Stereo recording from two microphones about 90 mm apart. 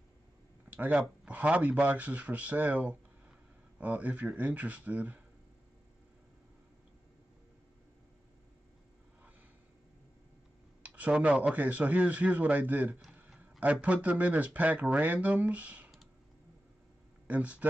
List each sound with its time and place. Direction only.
0.7 s speech: 15° right (ahead or behind)
10.8 s speech: 15° right (ahead or behind)
17.3 s speech: 15° right (ahead or behind)